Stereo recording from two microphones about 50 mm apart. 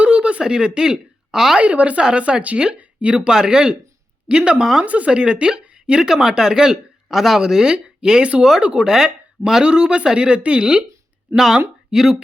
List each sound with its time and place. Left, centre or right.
0.0 s a sound: right
1.3 s a woman's voice: centre
1.5 s speech: right
4.6 s speech: centre
4.9 s a woman's voice: right
11.9 s speech: centre